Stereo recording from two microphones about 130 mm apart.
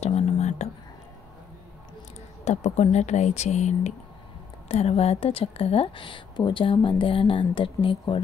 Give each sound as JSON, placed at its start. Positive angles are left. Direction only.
{"t": 0.0, "sound": "whispering", "side_deg": 60}
{"t": 2.4, "sound": "speech", "side_deg": 60}
{"t": 4.6, "sound": "a woman's voice", "side_deg": 50}